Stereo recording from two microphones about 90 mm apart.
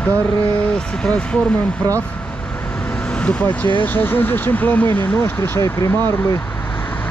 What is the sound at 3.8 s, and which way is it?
Speech, 20° left (ahead or behind).